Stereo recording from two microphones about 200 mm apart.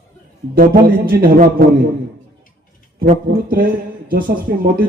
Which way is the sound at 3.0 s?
45° right (ahead or behind).